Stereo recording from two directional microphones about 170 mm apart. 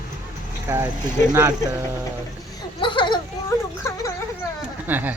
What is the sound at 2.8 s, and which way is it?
Speech, 30° left (ahead or behind).